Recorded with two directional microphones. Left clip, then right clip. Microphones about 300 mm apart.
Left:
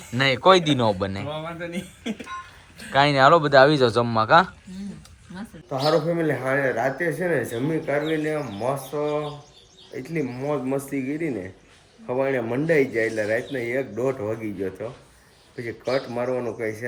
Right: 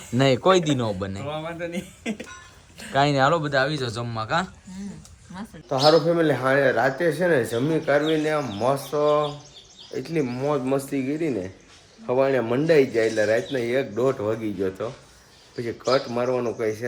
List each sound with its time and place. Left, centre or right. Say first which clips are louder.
0.2 s speech: left 2 dB; centre
2.9 s speech: left 4 dB; centre
5.6 s speech: right 4 dB; centre
9.9 s speech: right 3 dB; centre